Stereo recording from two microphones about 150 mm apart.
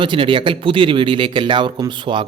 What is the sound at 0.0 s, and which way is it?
Speech, 35° right (ahead or behind).